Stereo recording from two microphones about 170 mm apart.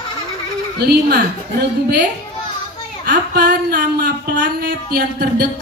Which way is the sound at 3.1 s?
55° right (ahead or behind).